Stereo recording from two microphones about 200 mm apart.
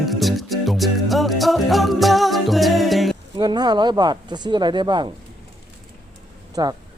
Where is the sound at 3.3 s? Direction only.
20° right (ahead or behind).